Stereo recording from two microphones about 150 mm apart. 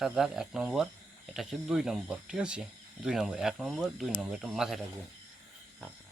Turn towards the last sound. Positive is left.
turn(degrees=0)  # may be behind; listen again after turning